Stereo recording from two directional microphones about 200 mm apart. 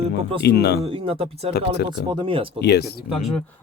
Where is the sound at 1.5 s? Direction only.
55° left (ahead or behind).